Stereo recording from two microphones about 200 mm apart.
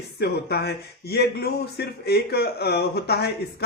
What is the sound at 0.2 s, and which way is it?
Speech, 55° left (ahead or behind).